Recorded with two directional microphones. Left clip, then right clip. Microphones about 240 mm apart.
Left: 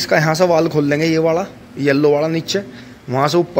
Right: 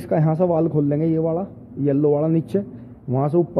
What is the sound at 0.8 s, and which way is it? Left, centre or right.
Speech, centre.